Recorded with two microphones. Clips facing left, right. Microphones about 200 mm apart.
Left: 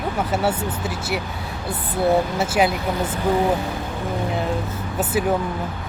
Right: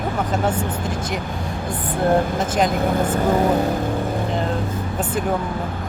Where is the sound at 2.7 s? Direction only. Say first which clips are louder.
Right 4 dB; 50° right (ahead or behind).